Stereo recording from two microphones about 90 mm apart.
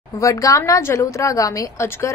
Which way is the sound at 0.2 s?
35° left (ahead or behind).